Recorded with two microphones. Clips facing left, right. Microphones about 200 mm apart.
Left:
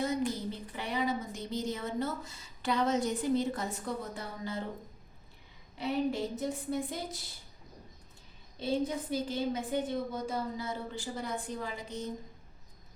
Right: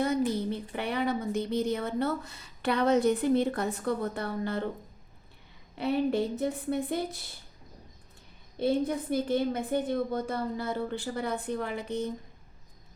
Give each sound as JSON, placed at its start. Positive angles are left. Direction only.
{"t": 0.3, "sound": "a woman's voice", "side_deg": -60}
{"t": 5.7, "sound": "a woman's voice", "side_deg": -60}
{"t": 8.5, "sound": "a woman's voice", "side_deg": -55}